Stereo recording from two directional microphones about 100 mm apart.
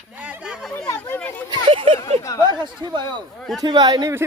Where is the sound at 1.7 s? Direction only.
60° right (ahead or behind).